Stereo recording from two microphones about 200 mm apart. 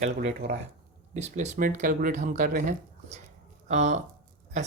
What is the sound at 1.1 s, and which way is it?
Speech, 35° right (ahead or behind).